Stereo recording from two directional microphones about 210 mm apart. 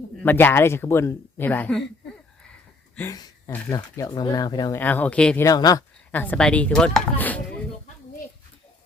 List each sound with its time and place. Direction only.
0.2 s speech: 10° left (ahead or behind)
2.9 s speech: 15° left (ahead or behind)
5.5 s speech: 15° left (ahead or behind)